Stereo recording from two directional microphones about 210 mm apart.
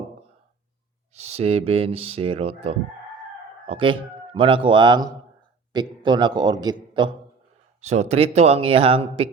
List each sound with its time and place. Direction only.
1.1 s speech: 30° right (ahead or behind)
7.8 s speech: 30° right (ahead or behind)